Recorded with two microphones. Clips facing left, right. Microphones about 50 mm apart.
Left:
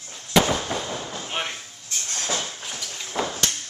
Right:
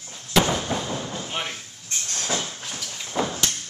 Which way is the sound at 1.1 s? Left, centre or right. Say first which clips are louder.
Left 1 dB; centre.